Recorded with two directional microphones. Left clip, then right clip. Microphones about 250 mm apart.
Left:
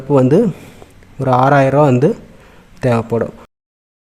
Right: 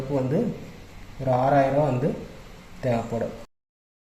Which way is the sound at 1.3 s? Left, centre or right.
Left.